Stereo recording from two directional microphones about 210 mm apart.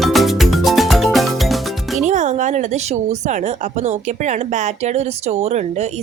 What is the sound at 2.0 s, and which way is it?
Music, 35° right (ahead or behind).